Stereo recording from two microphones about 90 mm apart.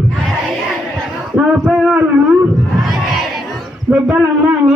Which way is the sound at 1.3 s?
10° right (ahead or behind).